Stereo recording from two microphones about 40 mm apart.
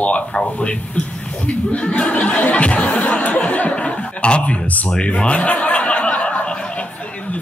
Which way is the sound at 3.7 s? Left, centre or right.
Left.